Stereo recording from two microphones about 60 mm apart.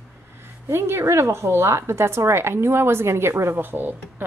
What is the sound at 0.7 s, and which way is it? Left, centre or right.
A woman's voice, right.